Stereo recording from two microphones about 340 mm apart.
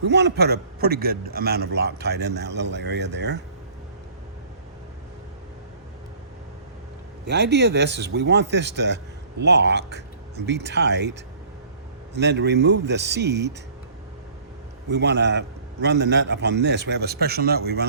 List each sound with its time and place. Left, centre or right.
0.0 s a man's voice: right
7.3 s speech: right
14.8 s a man's voice: right